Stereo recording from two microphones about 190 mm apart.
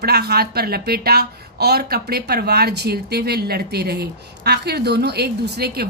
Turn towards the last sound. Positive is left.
turn(degrees=-55)  # may be behind; listen again after turning